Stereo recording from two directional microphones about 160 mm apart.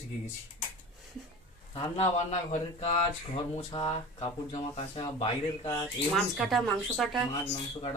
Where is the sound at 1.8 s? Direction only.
40° left (ahead or behind).